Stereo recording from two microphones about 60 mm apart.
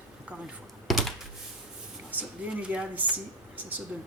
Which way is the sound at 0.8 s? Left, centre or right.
Centre.